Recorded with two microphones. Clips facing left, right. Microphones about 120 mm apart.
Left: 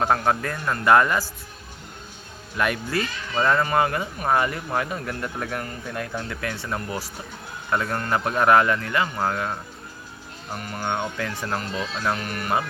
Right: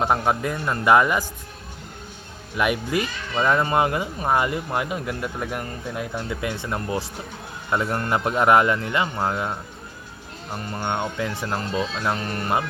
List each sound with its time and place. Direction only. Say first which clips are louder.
0.0 s speech: even; 15° right (ahead or behind)
2.6 s a man's voice: right 2 dB; 15° right (ahead or behind)
10.6 s a man's voice: right 1 dB; 25° right (ahead or behind)